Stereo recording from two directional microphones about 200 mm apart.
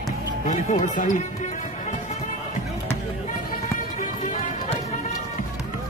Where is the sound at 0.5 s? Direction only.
35° left (ahead or behind).